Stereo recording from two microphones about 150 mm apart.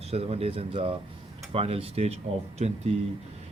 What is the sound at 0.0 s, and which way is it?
Speech, 45° right (ahead or behind).